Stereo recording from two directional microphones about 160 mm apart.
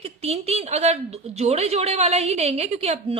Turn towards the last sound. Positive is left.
turn(degrees=-40)  # may be behind; listen again after turning